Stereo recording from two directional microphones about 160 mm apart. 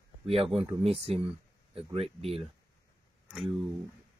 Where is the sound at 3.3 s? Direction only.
Centre (ahead or behind).